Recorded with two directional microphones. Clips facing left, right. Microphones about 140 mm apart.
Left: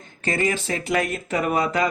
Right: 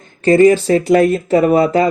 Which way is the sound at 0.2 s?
35° right (ahead or behind).